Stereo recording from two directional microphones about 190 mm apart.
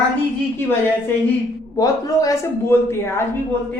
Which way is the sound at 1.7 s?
20° left (ahead or behind).